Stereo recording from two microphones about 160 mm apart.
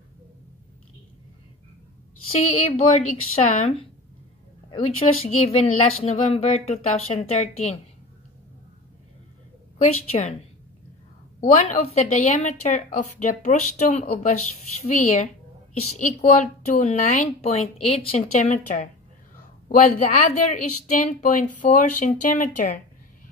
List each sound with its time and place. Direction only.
2.7 s a woman's voice: 45° left (ahead or behind)
9.8 s a woman's voice: 45° left (ahead or behind)
11.4 s a woman's voice: 50° left (ahead or behind)
17.8 s a woman's voice: 40° left (ahead or behind); by 22.8 s 55° left (ahead or behind)